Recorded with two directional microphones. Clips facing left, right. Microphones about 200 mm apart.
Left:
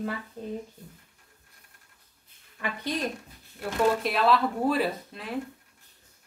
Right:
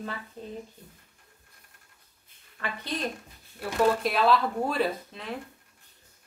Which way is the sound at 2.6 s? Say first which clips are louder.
Left 2 dB; 15° left (ahead or behind).